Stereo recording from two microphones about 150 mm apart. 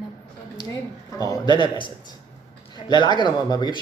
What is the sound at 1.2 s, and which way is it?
A man's voice, 25° left (ahead or behind).